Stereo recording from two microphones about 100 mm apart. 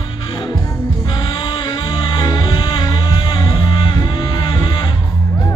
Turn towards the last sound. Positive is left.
turn(degrees=50)  # may be behind; listen again after turning